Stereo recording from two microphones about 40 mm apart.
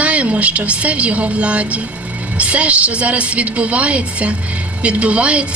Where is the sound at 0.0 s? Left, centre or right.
Right.